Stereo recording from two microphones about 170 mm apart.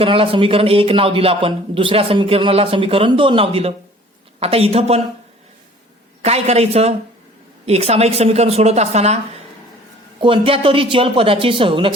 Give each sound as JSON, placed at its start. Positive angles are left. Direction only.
{"t": 0.0, "sound": "a man's voice", "side_deg": -35}
{"t": 6.2, "sound": "a man's voice", "side_deg": -40}